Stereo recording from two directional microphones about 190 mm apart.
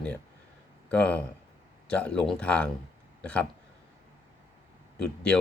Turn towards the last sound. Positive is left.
turn(degrees=5)  # may be behind; listen again after turning